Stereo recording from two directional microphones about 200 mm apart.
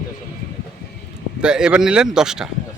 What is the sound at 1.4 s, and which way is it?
Speech, 5° right (ahead or behind).